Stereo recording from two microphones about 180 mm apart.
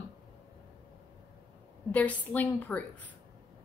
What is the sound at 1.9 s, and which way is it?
Speech, 10° left (ahead or behind).